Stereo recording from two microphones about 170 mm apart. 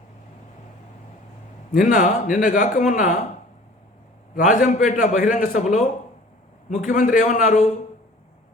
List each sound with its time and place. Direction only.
1.7 s a man's voice: 50° left (ahead or behind)
4.4 s a man's voice: 50° left (ahead or behind)